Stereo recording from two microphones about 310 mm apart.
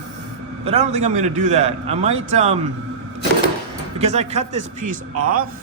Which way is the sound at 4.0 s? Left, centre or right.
Right.